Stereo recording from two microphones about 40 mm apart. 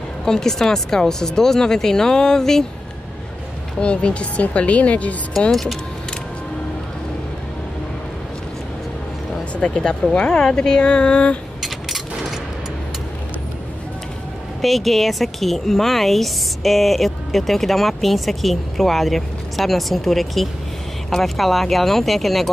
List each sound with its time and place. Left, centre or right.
0.2 s speech: centre
3.8 s speech: left
5.5 s a woman's voice: centre
9.6 s speech: centre
11.6 s coin: centre
14.6 s a woman's voice: centre